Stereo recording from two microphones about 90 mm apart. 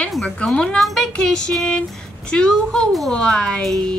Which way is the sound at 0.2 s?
10° left (ahead or behind).